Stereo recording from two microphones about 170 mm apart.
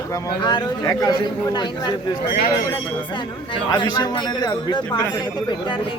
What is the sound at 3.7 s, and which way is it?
Speech, 25° left (ahead or behind).